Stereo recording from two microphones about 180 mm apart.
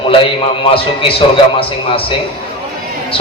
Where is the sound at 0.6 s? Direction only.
30° left (ahead or behind).